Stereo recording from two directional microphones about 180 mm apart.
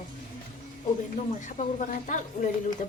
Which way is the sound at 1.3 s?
40° left (ahead or behind).